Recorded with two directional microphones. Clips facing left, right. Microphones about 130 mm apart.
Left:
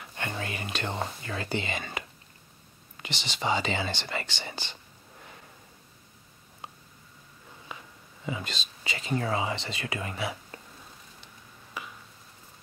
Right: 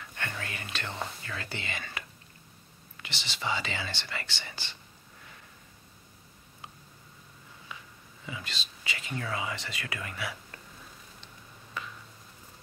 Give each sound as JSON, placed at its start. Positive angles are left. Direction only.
{"t": 0.0, "sound": "speech", "side_deg": 20}
{"t": 8.3, "sound": "speech", "side_deg": 30}
{"t": 11.8, "sound": "a sound", "side_deg": 10}